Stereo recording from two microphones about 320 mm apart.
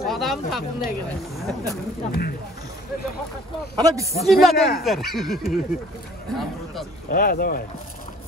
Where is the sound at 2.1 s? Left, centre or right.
Left.